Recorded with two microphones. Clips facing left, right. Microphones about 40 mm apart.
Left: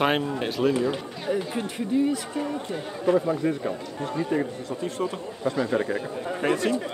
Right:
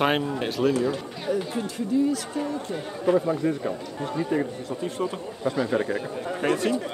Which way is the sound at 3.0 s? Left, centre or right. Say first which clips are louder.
Even; centre.